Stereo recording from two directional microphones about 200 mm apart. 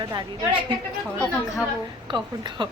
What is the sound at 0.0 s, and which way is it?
Speech, 20° right (ahead or behind).